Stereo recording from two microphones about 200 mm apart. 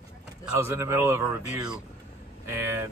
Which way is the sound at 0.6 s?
15° right (ahead or behind).